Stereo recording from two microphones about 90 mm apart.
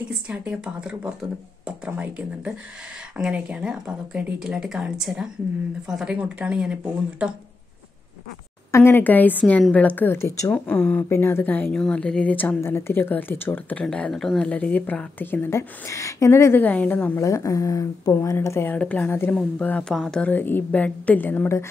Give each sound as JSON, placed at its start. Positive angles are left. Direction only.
{"t": 0.3, "sound": "speech", "side_deg": -15}
{"t": 8.7, "sound": "a woman's voice", "side_deg": 25}
{"t": 11.7, "sound": "a woman's voice", "side_deg": 10}
{"t": 12.5, "sound": "a woman's voice", "side_deg": 25}
{"t": 13.8, "sound": "speech", "side_deg": 10}
{"t": 14.5, "sound": "a woman's voice", "side_deg": 15}
{"t": 16.6, "sound": "a woman's voice", "side_deg": 15}
{"t": 17.2, "sound": "speech", "side_deg": 35}
{"t": 18.8, "sound": "a woman's voice", "side_deg": 15}
{"t": 19.0, "sound": "a woman's voice", "side_deg": 30}
{"t": 19.8, "sound": "a woman's voice", "side_deg": 5}